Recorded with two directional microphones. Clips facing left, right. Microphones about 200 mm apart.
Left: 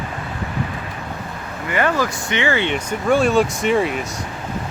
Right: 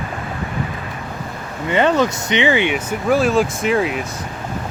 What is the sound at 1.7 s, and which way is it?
Speech, 20° right (ahead or behind).